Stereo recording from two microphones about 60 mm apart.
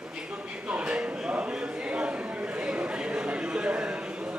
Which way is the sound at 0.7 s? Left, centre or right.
Centre.